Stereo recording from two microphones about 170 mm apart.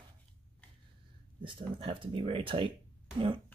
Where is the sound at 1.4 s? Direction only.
30° right (ahead or behind).